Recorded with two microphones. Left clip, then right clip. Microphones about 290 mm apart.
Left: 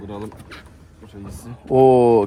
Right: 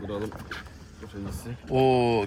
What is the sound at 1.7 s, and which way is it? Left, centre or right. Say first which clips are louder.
Speech: left 10 dB; centre.